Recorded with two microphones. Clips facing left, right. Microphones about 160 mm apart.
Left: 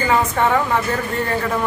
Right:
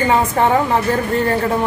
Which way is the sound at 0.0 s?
30° right (ahead or behind).